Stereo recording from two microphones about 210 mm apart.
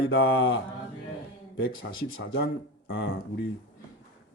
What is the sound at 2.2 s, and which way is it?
Speech, 50° left (ahead or behind).